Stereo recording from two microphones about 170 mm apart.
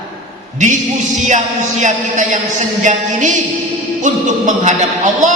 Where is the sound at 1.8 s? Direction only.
45° right (ahead or behind).